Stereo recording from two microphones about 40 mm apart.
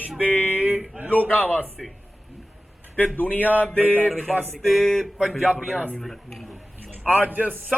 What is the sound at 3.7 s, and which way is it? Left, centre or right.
Speech, right.